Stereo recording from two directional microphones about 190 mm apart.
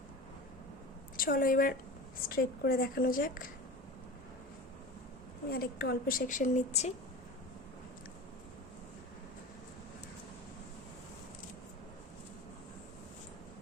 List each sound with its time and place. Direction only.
1.1 s a woman's voice: 50° left (ahead or behind)
5.5 s a woman's voice: 55° left (ahead or behind); by 6.9 s 35° left (ahead or behind)